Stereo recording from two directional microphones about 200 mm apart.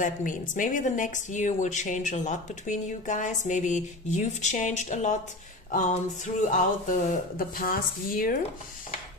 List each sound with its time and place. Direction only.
0.0 s a woman's voice: 40° left (ahead or behind)